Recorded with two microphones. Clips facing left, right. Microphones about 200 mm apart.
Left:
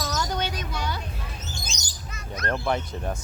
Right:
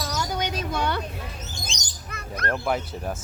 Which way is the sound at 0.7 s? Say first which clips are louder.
Right 5 dB; 60° right (ahead or behind).